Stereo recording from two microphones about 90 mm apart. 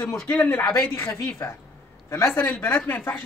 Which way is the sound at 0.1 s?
10° left (ahead or behind).